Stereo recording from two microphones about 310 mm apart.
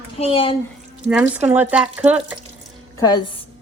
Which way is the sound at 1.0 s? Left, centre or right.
Centre.